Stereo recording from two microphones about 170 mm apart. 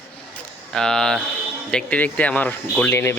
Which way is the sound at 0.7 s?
5° left (ahead or behind).